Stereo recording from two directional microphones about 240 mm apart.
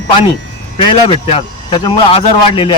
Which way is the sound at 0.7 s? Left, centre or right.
Left.